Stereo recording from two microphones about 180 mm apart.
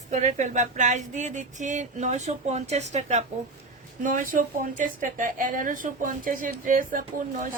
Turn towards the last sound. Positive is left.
turn(degrees=-50)  # may be behind; listen again after turning